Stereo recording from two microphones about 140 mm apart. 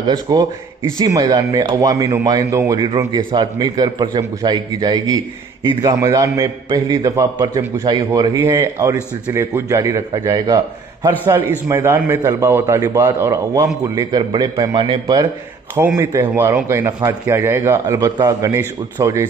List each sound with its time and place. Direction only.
0.0 s a man's voice: 25° right (ahead or behind)
11.1 s a man's voice: 15° right (ahead or behind)
16.0 s a man's voice: 20° right (ahead or behind)
17.9 s a man's voice: 30° right (ahead or behind)